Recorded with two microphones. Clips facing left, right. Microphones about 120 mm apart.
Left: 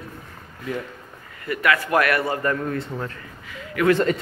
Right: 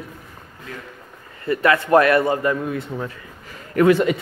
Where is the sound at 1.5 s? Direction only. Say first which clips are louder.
Right 5 dB; 30° right (ahead or behind).